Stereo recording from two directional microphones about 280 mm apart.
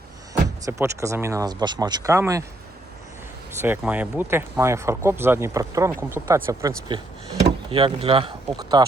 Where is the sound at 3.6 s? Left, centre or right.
Centre.